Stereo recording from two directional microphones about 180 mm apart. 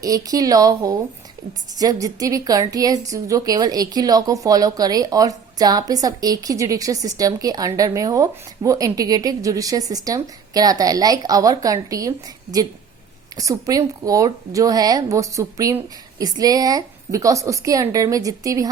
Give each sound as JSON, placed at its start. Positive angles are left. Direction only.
{"t": 0.0, "sound": "a woman's voice", "side_deg": -20}